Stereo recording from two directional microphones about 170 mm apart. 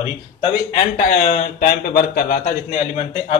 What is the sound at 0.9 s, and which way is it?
Speech, 55° left (ahead or behind).